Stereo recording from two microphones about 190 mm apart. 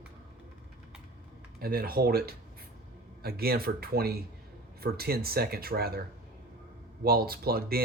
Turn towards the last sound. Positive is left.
turn(degrees=-55)  # may be behind; listen again after turning